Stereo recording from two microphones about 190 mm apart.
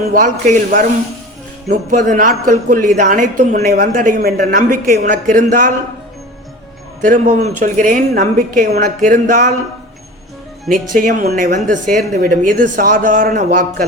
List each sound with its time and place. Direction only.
0.1 s a woman's voice: 40° right (ahead or behind)
1.6 s a woman's voice: 40° right (ahead or behind)
7.0 s a woman's voice: 45° right (ahead or behind)
9.0 s a woman's voice: 45° right (ahead or behind)
10.7 s a woman's voice: 45° right (ahead or behind)